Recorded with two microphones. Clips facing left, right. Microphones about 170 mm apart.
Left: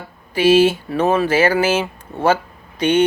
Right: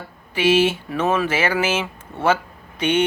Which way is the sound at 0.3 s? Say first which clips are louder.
Left 4 dB; 35° left (ahead or behind).